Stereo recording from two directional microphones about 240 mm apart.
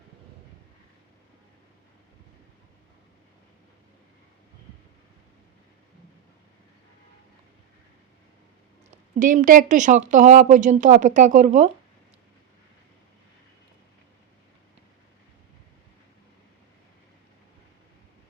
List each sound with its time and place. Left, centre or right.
8.9 s speech: right